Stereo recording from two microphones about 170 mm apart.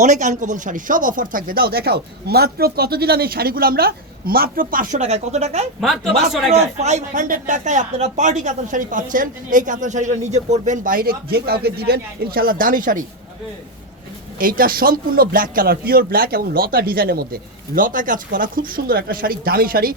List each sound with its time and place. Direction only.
0.0 s speech: 45° right (ahead or behind)
14.3 s speech: 55° right (ahead or behind)